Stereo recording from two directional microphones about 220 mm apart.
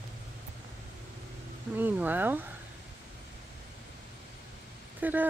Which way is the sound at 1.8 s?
10° right (ahead or behind).